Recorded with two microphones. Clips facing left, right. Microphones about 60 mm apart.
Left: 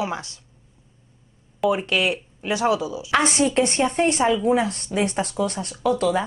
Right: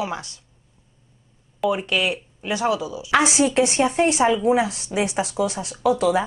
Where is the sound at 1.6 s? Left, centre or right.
Centre.